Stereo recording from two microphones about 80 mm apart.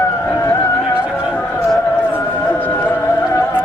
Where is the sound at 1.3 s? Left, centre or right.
Centre.